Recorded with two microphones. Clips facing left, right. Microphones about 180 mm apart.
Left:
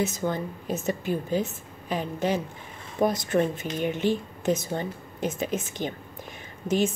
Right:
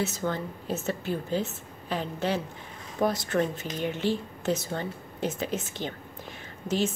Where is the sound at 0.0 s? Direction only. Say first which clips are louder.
Left 2 dB; 15° left (ahead or behind).